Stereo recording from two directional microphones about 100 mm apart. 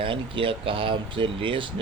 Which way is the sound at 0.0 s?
60° right (ahead or behind).